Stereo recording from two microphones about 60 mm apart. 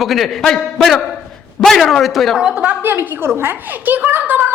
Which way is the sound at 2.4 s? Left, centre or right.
Centre.